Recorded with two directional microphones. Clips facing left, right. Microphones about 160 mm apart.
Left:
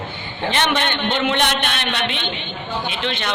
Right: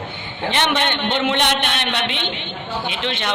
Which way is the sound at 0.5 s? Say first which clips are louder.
Even; 20° right (ahead or behind).